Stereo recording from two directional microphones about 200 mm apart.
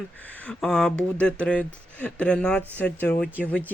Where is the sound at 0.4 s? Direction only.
5° left (ahead or behind).